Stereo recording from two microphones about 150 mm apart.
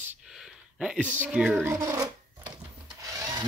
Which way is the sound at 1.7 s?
20° right (ahead or behind).